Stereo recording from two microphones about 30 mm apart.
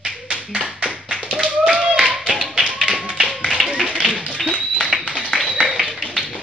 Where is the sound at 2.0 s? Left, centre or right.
Right.